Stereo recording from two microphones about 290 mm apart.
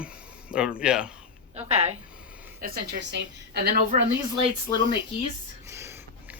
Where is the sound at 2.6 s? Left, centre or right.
Right.